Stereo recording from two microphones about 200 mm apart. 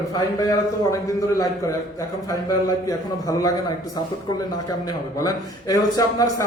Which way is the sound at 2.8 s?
15° left (ahead or behind).